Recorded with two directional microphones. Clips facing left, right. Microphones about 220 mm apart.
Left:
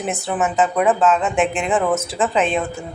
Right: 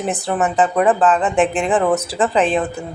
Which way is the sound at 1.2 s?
35° right (ahead or behind).